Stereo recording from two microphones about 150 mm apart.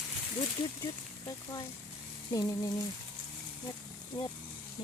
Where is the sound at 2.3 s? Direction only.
25° left (ahead or behind).